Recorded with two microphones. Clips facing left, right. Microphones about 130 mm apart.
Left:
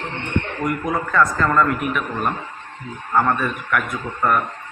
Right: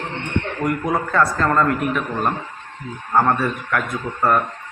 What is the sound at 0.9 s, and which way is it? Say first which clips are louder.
A man's voice: even; 30° right (ahead or behind).